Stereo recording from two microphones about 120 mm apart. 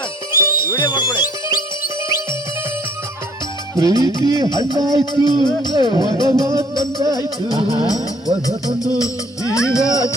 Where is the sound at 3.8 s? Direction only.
30° right (ahead or behind).